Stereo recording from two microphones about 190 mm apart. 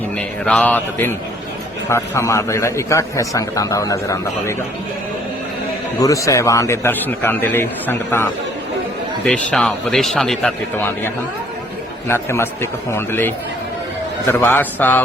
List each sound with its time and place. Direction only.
0.2 s a man's voice: 5° left (ahead or behind)
6.0 s a man's voice: 15° left (ahead or behind)